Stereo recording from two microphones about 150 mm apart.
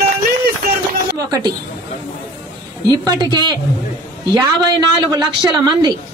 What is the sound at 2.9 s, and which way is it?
Speech, 30° right (ahead or behind).